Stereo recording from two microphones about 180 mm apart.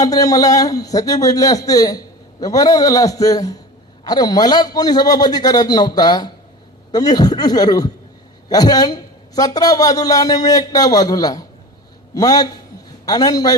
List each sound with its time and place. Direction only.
0.0 s a man's voice: 20° left (ahead or behind)